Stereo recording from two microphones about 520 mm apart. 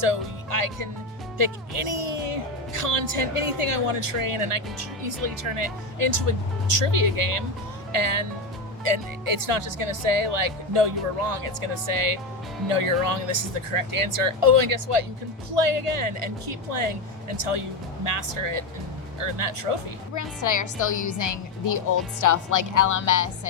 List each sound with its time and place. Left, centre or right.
0.0 s speech: right
20.1 s a woman's voice: left